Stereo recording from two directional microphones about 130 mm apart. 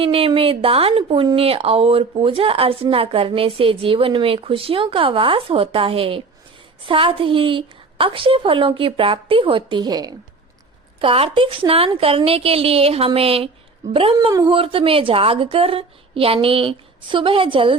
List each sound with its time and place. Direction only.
0.0 s speech: 45° right (ahead or behind); by 10.2 s 30° right (ahead or behind)
11.0 s speech: 45° right (ahead or behind)
14.2 s speech: 30° right (ahead or behind)